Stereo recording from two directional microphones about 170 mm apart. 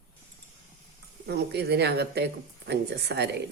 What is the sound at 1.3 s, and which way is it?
Speech, 75° right (ahead or behind).